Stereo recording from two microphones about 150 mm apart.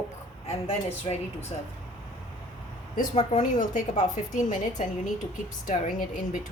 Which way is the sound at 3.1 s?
55° left (ahead or behind).